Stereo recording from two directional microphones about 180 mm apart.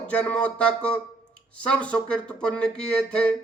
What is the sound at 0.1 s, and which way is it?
A man's voice, 5° left (ahead or behind).